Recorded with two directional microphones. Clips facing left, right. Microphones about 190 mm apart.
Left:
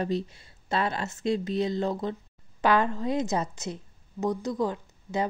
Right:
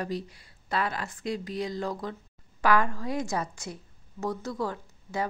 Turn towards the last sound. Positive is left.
turn(degrees=20)  # may be behind; listen again after turning